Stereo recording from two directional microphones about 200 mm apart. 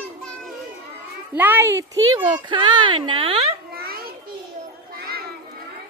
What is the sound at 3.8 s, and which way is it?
Children playing, 50° right (ahead or behind).